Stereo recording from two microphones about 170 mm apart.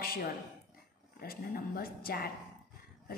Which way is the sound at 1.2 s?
60° left (ahead or behind).